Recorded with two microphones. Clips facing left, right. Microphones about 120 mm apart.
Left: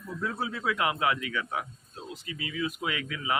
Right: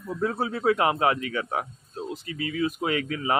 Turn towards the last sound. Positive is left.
turn(degrees=-40)  # may be behind; listen again after turning